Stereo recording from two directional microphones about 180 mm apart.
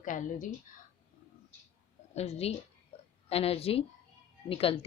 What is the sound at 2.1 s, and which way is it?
Speech, 35° left (ahead or behind).